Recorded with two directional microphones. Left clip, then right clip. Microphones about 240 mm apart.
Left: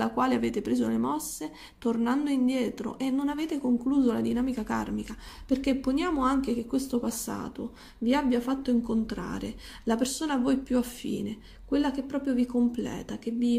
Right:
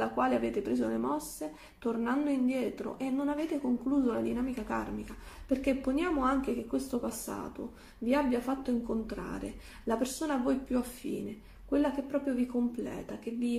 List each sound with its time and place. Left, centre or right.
0.0 s speech: left